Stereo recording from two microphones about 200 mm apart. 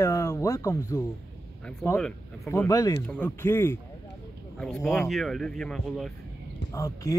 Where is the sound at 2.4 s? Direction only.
15° left (ahead or behind).